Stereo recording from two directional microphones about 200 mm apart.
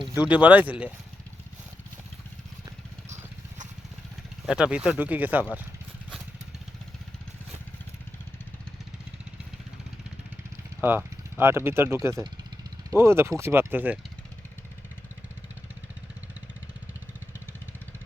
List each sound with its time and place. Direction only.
0.2 s speech: 5° right (ahead or behind)
4.4 s speech: 5° right (ahead or behind)
10.8 s speech: 10° right (ahead or behind)